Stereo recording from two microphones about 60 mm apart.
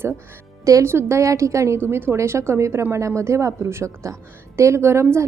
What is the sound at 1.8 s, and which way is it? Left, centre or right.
A woman's voice, right.